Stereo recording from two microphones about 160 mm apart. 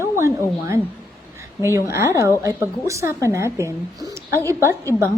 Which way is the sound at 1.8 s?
20° right (ahead or behind).